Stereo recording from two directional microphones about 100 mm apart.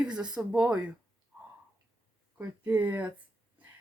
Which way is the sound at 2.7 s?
15° right (ahead or behind).